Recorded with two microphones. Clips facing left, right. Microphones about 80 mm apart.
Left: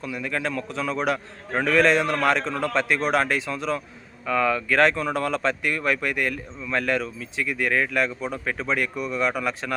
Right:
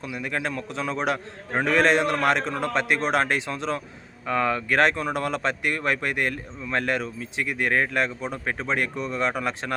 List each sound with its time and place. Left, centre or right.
0.0 s a man's voice: right
4.7 s a man's voice: right
7.7 s speech: right
7.9 s a man's voice: right